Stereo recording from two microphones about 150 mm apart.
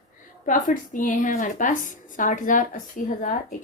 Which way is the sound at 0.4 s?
60° left (ahead or behind).